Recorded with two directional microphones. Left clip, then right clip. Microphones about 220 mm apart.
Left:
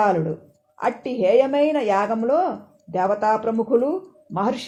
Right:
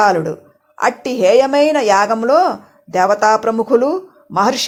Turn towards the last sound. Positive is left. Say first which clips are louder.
# right 9 dB
turn(degrees=-25)  # may be behind; listen again after turning